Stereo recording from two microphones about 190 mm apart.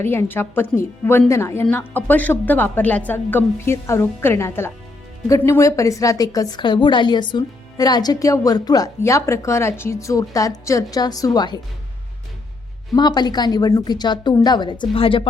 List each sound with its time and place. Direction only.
0.0 s a woman's voice: 10° left (ahead or behind)
12.9 s a woman's voice: 20° left (ahead or behind)